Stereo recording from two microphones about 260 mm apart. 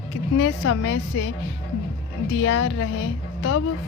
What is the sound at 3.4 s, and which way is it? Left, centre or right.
Speech, left.